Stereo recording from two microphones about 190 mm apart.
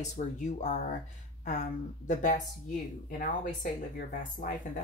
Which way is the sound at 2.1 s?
40° left (ahead or behind).